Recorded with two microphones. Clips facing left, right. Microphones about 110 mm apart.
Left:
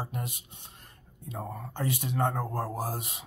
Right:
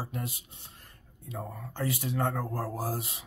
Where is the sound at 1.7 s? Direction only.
20° left (ahead or behind).